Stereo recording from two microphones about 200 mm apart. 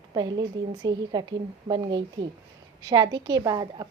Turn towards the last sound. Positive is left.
turn(degrees=-20)  # may be behind; listen again after turning